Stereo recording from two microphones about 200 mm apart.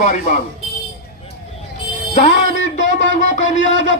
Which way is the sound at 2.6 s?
40° left (ahead or behind).